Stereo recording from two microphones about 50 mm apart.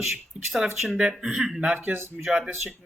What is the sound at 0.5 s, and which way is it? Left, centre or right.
Speech, centre.